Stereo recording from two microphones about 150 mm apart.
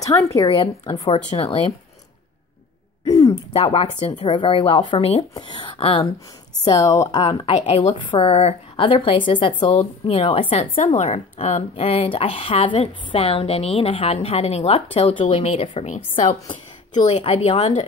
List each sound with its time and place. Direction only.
0.0 s speech: 20° left (ahead or behind)
0.5 s a woman's voice: 30° left (ahead or behind)
3.1 s throat clearing: 25° left (ahead or behind)
3.5 s a woman's voice: 35° left (ahead or behind)
6.6 s speech: 25° left (ahead or behind)
7.2 s a woman's voice: 40° left (ahead or behind)
17.1 s speech: 45° left (ahead or behind)